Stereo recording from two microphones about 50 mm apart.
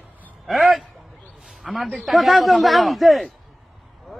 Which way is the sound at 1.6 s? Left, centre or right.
Centre.